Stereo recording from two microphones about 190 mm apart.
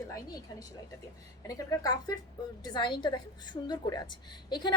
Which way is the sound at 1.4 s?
20° left (ahead or behind).